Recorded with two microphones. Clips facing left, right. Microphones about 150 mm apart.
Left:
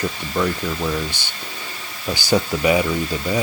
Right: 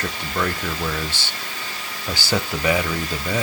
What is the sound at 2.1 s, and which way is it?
Speech, 15° left (ahead or behind).